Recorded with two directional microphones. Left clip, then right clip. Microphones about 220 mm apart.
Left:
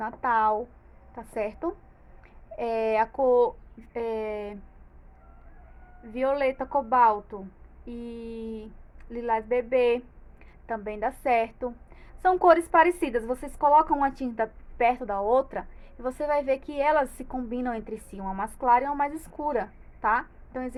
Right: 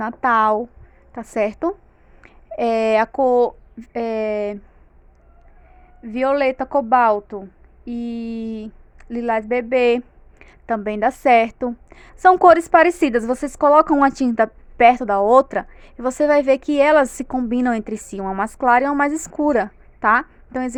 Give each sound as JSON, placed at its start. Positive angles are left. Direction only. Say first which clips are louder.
{"t": 0.0, "sound": "a woman's voice", "louder": "right 8 dB", "side_deg": -50}
{"t": 6.0, "sound": "a woman's voice", "louder": "right 8 dB", "side_deg": -50}